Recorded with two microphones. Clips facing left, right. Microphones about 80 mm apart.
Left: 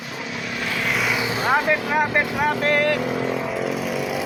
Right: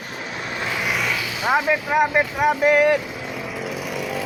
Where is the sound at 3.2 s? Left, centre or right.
Left.